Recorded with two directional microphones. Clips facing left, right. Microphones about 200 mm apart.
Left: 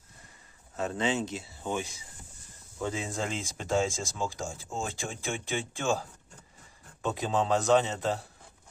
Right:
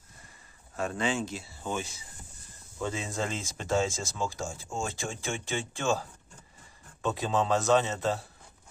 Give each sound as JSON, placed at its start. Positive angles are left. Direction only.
{"t": 0.8, "sound": "speech", "side_deg": 20}
{"t": 7.0, "sound": "speech", "side_deg": 15}